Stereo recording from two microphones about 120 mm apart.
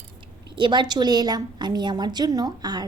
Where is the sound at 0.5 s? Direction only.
40° right (ahead or behind).